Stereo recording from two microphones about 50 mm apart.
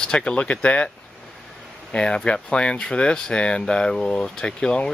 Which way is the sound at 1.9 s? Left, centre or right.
Centre.